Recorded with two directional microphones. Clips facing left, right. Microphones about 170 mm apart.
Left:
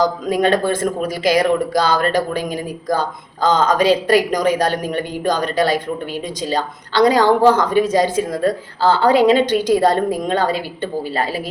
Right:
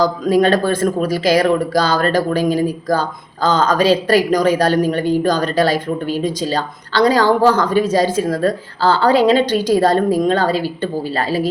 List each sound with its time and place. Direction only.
0.0 s a woman's voice: 20° left (ahead or behind)